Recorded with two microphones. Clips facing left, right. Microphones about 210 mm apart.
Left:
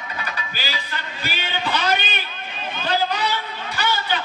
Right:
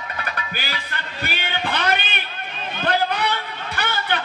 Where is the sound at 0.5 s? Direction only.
60° right (ahead or behind).